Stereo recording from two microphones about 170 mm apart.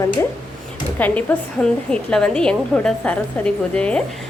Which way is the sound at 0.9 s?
10° left (ahead or behind).